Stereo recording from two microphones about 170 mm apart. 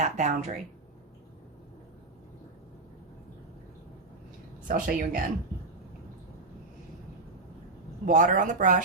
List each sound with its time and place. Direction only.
0.0 s speech: 45° right (ahead or behind)
4.7 s speech: 55° right (ahead or behind)
8.0 s speech: 45° right (ahead or behind)